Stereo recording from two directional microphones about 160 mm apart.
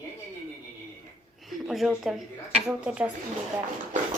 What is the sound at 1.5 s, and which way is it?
A woman's voice, centre (ahead or behind).